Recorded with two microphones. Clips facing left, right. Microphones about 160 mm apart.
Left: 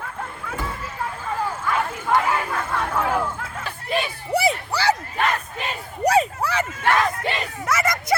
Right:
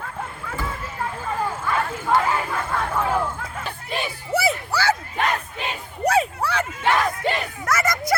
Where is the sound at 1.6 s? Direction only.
Centre (ahead or behind).